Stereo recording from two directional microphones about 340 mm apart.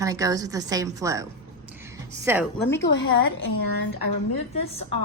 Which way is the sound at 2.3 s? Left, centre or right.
Centre.